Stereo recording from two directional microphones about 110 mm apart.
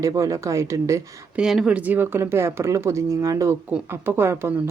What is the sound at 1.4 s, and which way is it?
Speech, 5° right (ahead or behind).